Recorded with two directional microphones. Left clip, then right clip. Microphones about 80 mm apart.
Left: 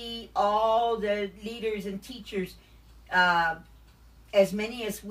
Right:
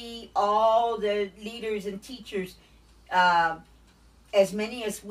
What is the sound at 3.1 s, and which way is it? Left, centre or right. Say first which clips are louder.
Speech: right 2 dB; right.